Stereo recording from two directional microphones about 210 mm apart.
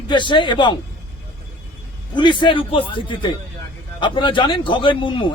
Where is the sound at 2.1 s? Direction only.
20° left (ahead or behind).